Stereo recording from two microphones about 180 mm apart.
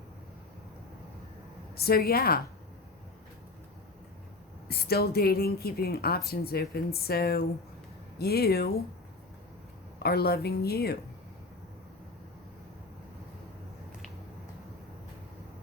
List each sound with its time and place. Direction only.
1.7 s a woman's voice: 55° left (ahead or behind)
4.7 s a woman's voice: 60° left (ahead or behind)
10.0 s a woman's voice: 60° left (ahead or behind)